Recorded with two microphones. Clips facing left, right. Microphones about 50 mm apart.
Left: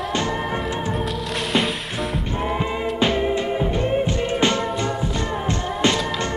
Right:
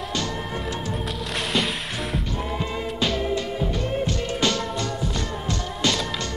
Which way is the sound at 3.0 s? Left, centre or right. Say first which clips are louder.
Left 4 dB; left.